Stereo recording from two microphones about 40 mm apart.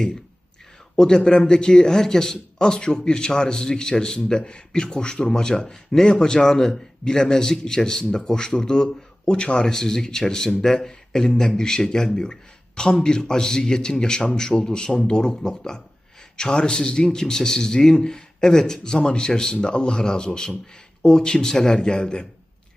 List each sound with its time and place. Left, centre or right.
0.9 s speech: centre
9.6 s speech: centre